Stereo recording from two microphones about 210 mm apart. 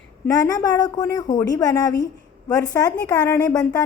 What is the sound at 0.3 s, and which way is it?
A woman's voice, 15° left (ahead or behind).